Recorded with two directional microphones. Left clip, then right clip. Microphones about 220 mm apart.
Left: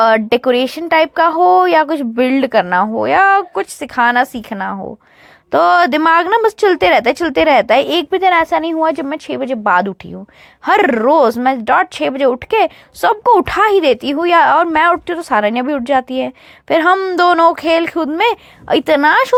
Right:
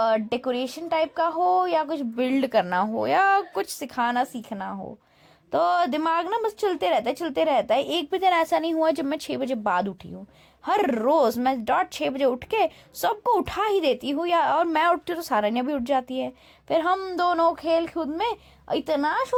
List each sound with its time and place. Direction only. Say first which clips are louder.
0.0 s speech: left 12 dB; 25° left (ahead or behind)